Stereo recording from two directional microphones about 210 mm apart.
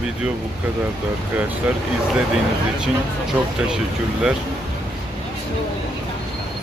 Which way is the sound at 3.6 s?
5° right (ahead or behind).